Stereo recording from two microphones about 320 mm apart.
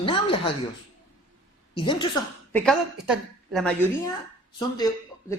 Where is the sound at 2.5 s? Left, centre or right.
Centre.